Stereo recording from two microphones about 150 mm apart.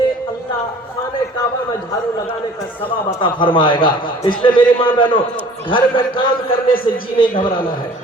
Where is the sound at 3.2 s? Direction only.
35° left (ahead or behind).